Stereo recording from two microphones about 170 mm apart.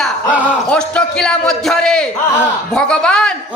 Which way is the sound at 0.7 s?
5° left (ahead or behind).